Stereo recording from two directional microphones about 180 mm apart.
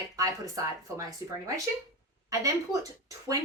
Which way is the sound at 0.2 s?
20° right (ahead or behind).